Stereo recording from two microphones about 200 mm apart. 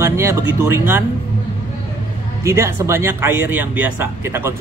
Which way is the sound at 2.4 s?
15° right (ahead or behind).